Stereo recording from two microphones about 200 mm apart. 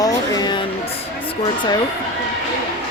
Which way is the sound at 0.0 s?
20° left (ahead or behind).